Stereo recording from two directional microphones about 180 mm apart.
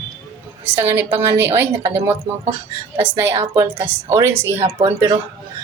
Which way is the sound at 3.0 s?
10° right (ahead or behind).